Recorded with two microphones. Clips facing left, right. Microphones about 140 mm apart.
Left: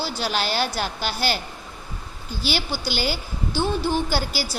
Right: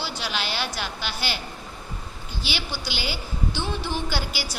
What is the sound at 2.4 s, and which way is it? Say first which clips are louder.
A woman's voice: left 6 dB; 45° left (ahead or behind).